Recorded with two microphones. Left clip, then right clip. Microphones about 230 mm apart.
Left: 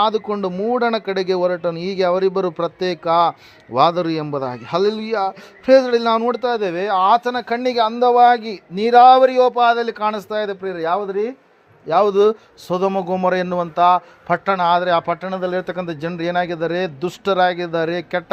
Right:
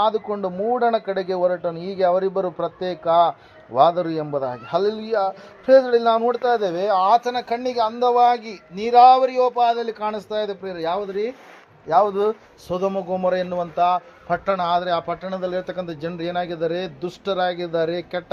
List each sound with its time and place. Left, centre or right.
0.0 s a man's voice: left
11.9 s a man's voice: left